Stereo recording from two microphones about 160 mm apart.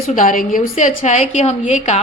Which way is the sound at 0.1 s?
55° left (ahead or behind).